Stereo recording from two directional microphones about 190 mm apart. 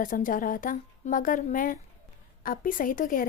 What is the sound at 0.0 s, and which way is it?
A woman's voice, 45° left (ahead or behind).